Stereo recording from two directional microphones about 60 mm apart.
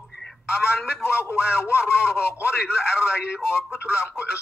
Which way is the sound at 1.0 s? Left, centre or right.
Left.